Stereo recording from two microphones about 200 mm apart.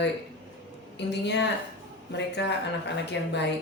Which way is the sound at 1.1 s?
60° left (ahead or behind).